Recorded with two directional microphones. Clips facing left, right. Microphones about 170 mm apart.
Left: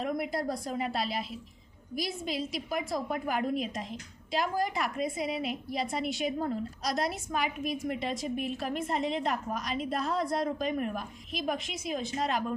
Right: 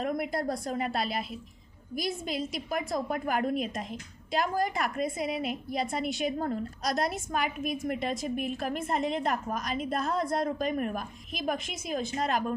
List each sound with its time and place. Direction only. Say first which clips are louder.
0.0 s a woman's voice: right 1 dB; 50° right (ahead or behind)